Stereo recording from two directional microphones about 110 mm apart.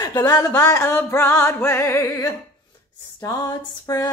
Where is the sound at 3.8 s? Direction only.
30° left (ahead or behind).